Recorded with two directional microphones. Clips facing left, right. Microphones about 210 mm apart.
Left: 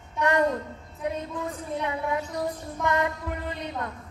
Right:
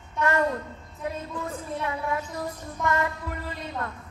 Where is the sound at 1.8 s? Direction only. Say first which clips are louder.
Left 1 dB; 20° left (ahead or behind).